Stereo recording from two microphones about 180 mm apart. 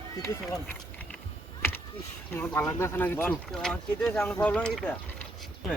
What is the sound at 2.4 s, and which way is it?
Speech, 10° left (ahead or behind).